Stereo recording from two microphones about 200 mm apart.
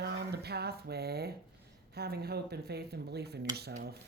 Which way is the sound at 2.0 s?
50° right (ahead or behind).